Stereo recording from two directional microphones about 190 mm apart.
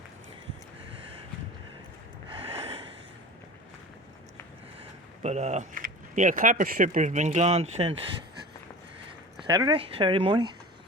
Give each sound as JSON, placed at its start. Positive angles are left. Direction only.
{"t": 2.3, "sound": "gasp", "side_deg": -30}
{"t": 4.8, "sound": "speech", "side_deg": -35}
{"t": 9.5, "sound": "speech", "side_deg": -20}